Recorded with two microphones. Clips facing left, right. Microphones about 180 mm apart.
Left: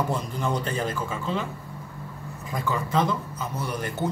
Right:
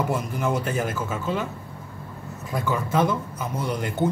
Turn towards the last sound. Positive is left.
turn(degrees=-15)  # may be behind; listen again after turning